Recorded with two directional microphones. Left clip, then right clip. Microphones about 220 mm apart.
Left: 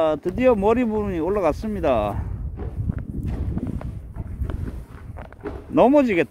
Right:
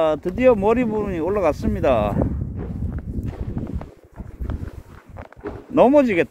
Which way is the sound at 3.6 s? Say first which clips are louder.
Left 1 dB; 20° left (ahead or behind).